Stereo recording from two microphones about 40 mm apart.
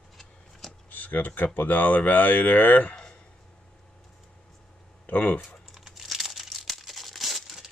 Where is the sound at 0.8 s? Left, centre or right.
Left.